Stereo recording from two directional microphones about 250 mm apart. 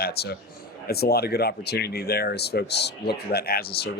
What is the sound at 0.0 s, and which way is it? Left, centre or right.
Speech, left.